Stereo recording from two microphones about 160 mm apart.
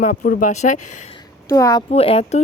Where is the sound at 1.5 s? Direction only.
20° left (ahead or behind).